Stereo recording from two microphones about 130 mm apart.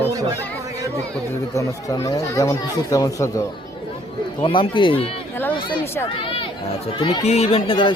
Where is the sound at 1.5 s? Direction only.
25° left (ahead or behind).